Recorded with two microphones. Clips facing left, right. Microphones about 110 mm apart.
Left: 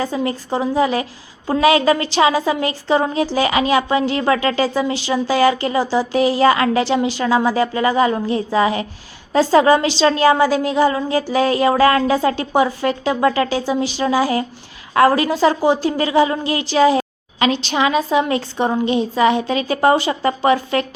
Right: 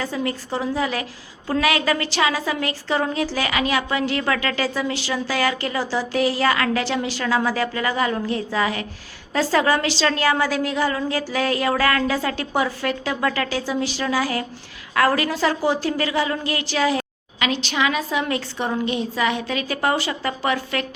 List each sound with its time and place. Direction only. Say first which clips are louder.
0.0 s a woman's voice: left 4 dB; 25° left (ahead or behind)